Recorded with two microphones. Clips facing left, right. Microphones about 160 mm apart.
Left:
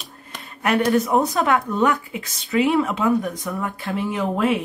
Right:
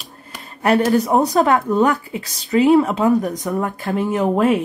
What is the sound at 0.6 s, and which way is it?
Speech, 35° right (ahead or behind).